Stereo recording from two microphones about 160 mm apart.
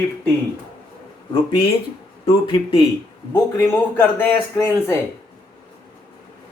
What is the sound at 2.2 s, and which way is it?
Speech, 30° left (ahead or behind).